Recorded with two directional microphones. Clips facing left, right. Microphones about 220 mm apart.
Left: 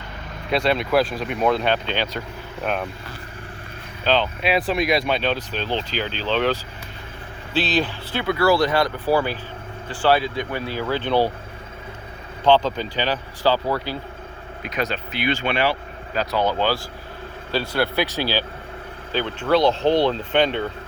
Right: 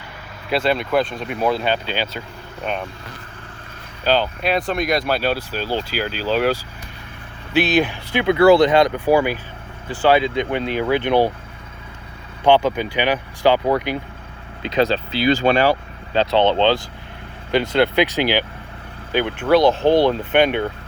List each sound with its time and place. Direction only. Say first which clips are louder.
0.5 s speech: right 1 dB; centre (ahead or behind)
4.0 s speech: right 2 dB; 5° right (ahead or behind)
12.5 s speech: right 2 dB; 15° right (ahead or behind)
14.6 s speech: right 8 dB; 30° right (ahead or behind)
16.1 s speech: right 6 dB; 25° right (ahead or behind)
19.7 s speech: right 3 dB; 55° right (ahead or behind)
20.0 s speech: right 3 dB; 15° right (ahead or behind)